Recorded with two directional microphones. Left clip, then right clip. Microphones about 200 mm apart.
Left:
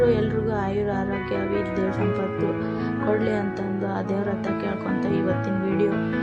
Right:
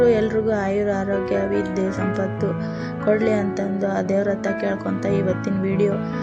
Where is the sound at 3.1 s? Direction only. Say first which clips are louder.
Right 5 dB; 15° right (ahead or behind).